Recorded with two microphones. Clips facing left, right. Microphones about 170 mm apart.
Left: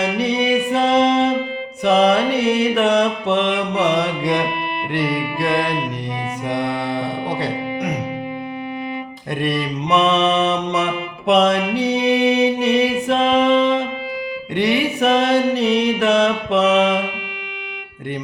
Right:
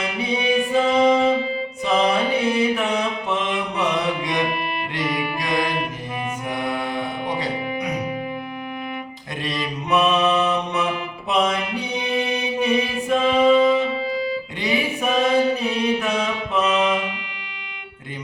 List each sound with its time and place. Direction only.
0.0 s music: 75° left (ahead or behind)
1.8 s mantra: 70° left (ahead or behind)
4.9 s music: 60° left (ahead or behind)
9.4 s mantra: 65° left (ahead or behind)
10.4 s music: 80° left
11.3 s mantra: 75° left (ahead or behind)